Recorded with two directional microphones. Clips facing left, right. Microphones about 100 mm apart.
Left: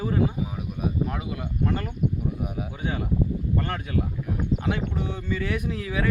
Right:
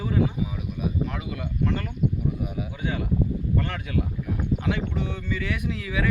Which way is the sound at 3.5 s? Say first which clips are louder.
Left 1 dB; 30° left (ahead or behind).